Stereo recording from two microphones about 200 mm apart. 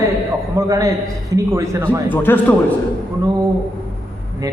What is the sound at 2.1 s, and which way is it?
Speech, 10° left (ahead or behind).